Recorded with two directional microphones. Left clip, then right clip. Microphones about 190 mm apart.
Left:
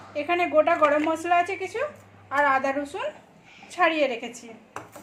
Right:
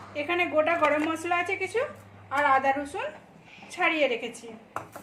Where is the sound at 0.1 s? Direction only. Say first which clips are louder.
Left 3 dB; 25° left (ahead or behind).